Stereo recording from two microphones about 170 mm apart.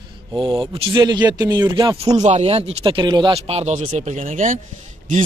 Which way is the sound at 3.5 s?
40° right (ahead or behind).